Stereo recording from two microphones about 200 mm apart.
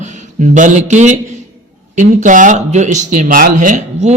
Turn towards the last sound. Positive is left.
turn(degrees=-35)  # may be behind; listen again after turning